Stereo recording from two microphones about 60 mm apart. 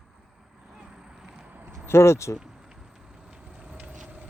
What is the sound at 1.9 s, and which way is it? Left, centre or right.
Speech, left.